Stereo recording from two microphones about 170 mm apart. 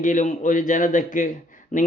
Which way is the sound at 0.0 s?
50° left (ahead or behind).